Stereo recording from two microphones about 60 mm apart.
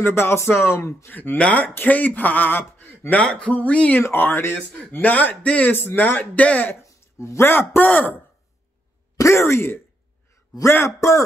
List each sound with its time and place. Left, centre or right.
0.0 s speech: left
1.1 s speech: left
3.2 s speech: centre
5.7 s speech: left
6.7 s a man's voice: left
9.1 s speech: left
11.0 s speech: left